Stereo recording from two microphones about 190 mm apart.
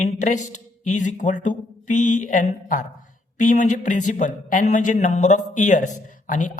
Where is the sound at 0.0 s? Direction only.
40° left (ahead or behind).